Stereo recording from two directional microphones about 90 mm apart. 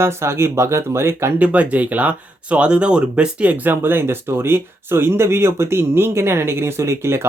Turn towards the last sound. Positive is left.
turn(degrees=-30)  # may be behind; listen again after turning